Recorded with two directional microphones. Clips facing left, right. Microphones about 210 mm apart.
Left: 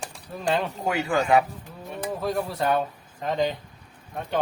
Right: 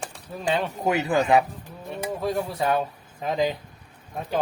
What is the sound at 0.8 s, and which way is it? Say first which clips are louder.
Speech: right 2 dB; 20° right (ahead or behind).